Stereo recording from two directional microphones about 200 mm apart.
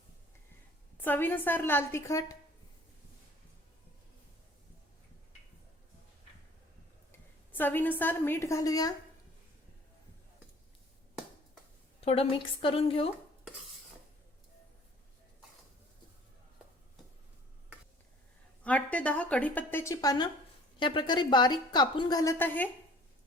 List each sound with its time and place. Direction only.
1.0 s a woman's voice: 10° left (ahead or behind)
7.1 s a woman's voice: 10° left (ahead or behind)
11.9 s a woman's voice: 30° left (ahead or behind)
18.6 s a woman's voice: 5° left (ahead or behind)